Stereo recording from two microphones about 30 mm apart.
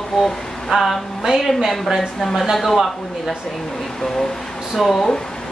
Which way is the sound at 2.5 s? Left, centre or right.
Centre.